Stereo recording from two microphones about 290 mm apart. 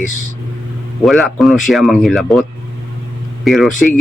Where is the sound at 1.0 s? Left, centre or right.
Centre.